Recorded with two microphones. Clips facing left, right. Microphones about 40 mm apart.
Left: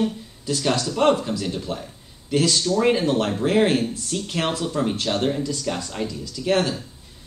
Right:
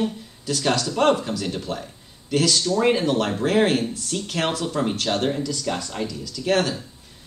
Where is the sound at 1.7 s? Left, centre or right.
Centre.